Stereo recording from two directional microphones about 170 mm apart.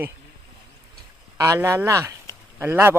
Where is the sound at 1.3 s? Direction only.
15° right (ahead or behind).